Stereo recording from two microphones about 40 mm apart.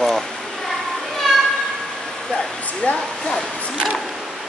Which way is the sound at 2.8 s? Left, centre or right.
Left.